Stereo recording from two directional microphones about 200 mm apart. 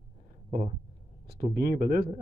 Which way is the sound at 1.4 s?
50° right (ahead or behind).